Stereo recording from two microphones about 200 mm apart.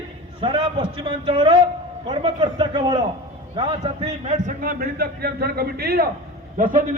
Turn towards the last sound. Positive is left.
turn(degrees=-45)  # may be behind; listen again after turning